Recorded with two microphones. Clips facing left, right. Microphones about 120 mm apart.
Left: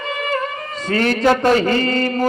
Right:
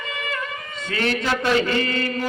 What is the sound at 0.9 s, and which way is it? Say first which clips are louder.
Mantra: left 8 dB; 40° left (ahead or behind).